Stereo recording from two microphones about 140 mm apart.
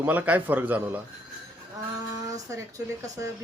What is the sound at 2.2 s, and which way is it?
Speech, 25° right (ahead or behind).